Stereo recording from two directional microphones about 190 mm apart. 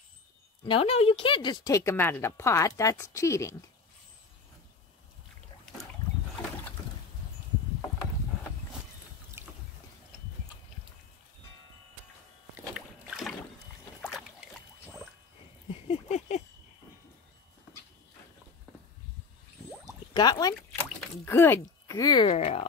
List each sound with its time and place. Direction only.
0.7 s speech: 30° left (ahead or behind); by 3.5 s 15° left (ahead or behind)
9.4 s boat: 15° right (ahead or behind)
12.7 s boat: 5° right (ahead or behind)
15.7 s a sound: 35° left (ahead or behind)
20.2 s a sound: 20° left (ahead or behind)
22.4 s speech: 35° left (ahead or behind)